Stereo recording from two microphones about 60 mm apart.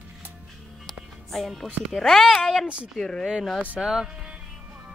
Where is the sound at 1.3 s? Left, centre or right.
Centre.